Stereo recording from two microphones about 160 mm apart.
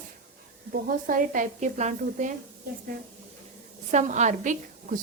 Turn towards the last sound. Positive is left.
turn(degrees=-55)  # may be behind; listen again after turning